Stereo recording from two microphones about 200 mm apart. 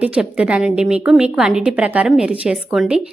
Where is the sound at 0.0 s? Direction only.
5° right (ahead or behind).